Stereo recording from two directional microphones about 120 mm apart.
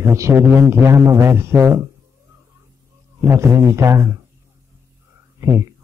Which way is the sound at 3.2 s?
25° right (ahead or behind).